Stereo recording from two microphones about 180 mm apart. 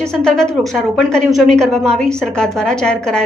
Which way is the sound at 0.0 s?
5° left (ahead or behind).